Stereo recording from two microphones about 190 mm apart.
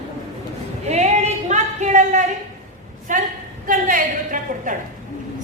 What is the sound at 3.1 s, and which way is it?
A woman's voice, 40° right (ahead or behind).